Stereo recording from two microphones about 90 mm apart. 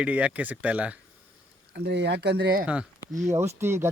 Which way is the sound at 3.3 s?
30° right (ahead or behind).